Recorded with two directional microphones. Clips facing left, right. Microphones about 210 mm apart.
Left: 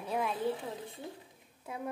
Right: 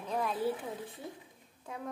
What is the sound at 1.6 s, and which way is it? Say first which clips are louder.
Speech: left 2 dB; 10° left (ahead or behind).